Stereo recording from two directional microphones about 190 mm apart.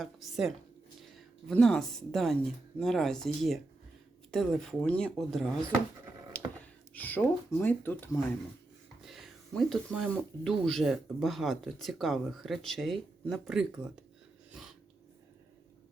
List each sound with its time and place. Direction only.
0.0 s a woman's voice: centre (ahead or behind)
6.3 s a sound: 10° left (ahead or behind)
7.5 s speech: 10° left (ahead or behind)
9.0 s speech: centre (ahead or behind)